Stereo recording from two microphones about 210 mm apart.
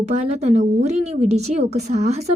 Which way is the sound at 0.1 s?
30° right (ahead or behind).